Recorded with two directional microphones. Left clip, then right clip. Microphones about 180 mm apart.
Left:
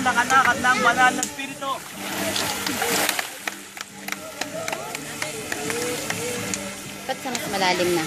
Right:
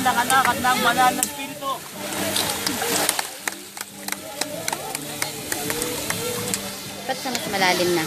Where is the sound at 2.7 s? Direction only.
Centre (ahead or behind).